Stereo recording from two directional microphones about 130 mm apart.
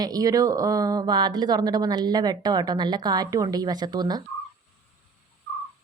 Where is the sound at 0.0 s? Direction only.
30° right (ahead or behind).